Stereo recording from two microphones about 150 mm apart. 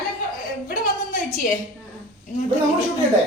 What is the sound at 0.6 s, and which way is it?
Speech, 65° left (ahead or behind).